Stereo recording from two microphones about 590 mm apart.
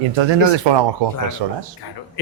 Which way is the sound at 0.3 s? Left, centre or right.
Right.